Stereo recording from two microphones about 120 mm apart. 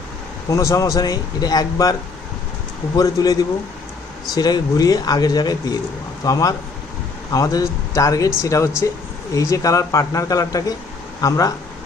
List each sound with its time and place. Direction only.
0.5 s speech: 25° left (ahead or behind)
4.4 s speech: 35° left (ahead or behind)